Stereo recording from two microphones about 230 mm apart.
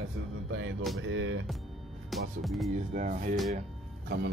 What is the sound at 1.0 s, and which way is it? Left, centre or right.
Speech, right.